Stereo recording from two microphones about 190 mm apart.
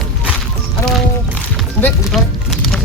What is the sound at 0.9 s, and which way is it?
Music, 5° left (ahead or behind).